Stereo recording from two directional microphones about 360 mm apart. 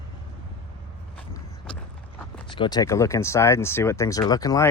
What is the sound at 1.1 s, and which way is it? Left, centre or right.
Vehicle, centre.